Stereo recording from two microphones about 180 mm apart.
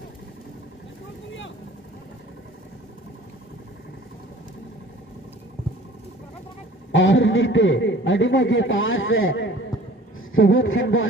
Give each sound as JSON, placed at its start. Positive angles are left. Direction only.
{"t": 6.9, "sound": "a man's voice", "side_deg": 90}